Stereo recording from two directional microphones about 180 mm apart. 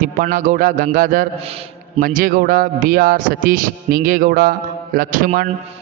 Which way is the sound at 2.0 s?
50° right (ahead or behind).